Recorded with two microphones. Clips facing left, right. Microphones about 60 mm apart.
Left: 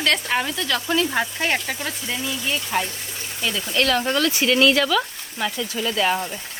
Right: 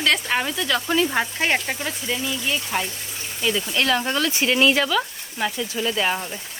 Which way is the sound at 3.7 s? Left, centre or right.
Right.